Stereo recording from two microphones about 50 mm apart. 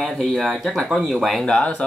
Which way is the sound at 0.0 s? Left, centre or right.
Centre.